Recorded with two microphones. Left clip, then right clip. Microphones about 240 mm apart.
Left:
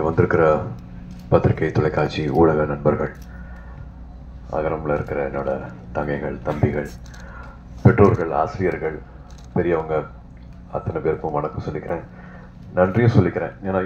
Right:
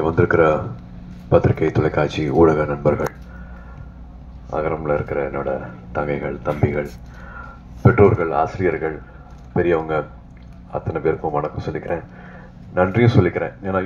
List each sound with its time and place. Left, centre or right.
0.0 s speech: right
4.5 s speech: right
7.8 s speech: right